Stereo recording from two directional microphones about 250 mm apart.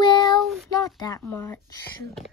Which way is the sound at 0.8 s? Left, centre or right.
Centre.